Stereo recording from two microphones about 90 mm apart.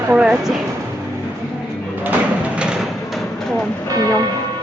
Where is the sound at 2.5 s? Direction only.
10° right (ahead or behind).